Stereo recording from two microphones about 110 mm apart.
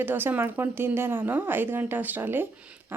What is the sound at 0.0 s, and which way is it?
Speech, 20° right (ahead or behind).